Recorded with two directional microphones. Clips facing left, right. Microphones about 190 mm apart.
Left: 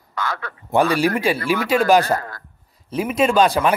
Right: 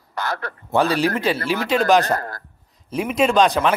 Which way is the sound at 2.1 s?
40° right (ahead or behind).